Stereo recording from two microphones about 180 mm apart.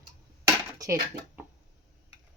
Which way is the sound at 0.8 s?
20° right (ahead or behind).